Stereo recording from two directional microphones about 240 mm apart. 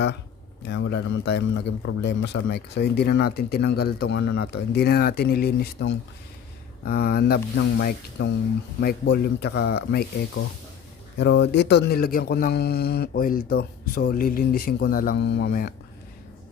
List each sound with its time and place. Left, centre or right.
0.7 s speech: left
11.2 s speech: left